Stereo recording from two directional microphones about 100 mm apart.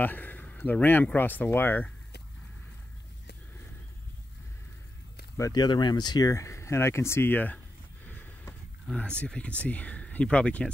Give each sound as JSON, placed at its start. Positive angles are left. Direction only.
{"t": 0.0, "sound": "speech", "side_deg": 20}
{"t": 5.5, "sound": "speech", "side_deg": 45}
{"t": 8.1, "sound": "a sound", "side_deg": 20}
{"t": 9.2, "sound": "speech", "side_deg": 10}